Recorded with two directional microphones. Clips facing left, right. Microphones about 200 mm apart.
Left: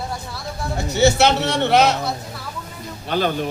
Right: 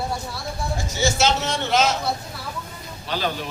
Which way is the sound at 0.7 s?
65° left (ahead or behind).